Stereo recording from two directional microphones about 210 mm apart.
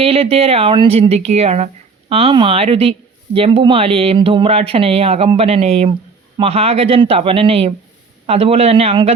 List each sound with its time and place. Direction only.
0.0 s speech: 30° right (ahead or behind)